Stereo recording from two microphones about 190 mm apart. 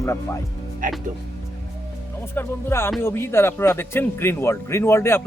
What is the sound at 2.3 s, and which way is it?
Speech, 10° left (ahead or behind).